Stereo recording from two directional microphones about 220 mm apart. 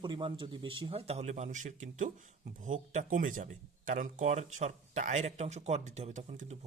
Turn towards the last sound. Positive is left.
turn(degrees=-30)  # may be behind; listen again after turning